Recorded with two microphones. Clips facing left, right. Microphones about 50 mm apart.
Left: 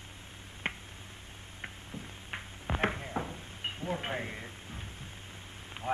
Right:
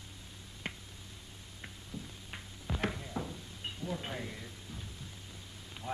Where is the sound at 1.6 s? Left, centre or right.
Left.